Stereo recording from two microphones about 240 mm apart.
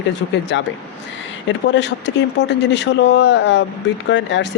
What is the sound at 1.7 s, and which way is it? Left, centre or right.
Speech, left.